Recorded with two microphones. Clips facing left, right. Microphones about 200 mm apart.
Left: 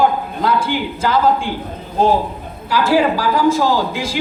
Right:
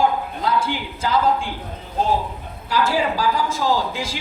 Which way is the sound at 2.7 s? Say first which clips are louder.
Left 6 dB; 80° left.